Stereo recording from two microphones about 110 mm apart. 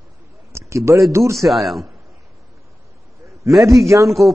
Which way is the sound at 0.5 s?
25° right (ahead or behind).